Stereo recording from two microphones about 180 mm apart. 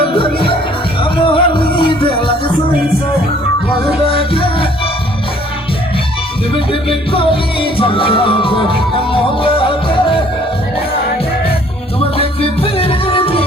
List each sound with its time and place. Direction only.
0.0 s music: 30° left (ahead or behind)
4.1 s music: 30° left (ahead or behind)
6.5 s music: 30° left (ahead or behind)
12.1 s music: 30° left (ahead or behind)